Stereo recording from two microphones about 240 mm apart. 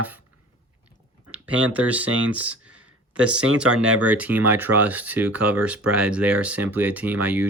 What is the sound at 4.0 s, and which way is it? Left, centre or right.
Speech, centre.